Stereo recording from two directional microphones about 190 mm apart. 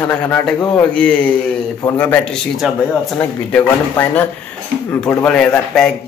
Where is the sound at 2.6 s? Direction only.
Centre (ahead or behind).